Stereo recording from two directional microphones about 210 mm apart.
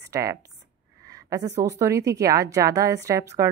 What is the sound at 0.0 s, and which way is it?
A woman's voice, 15° right (ahead or behind).